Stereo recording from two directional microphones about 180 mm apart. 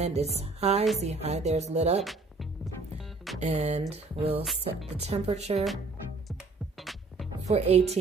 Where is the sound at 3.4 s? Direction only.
35° right (ahead or behind).